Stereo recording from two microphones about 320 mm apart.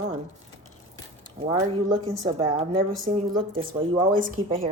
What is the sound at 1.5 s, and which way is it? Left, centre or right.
A woman's voice, centre.